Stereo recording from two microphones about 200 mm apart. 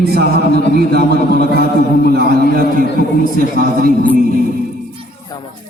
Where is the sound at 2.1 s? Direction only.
50° right (ahead or behind).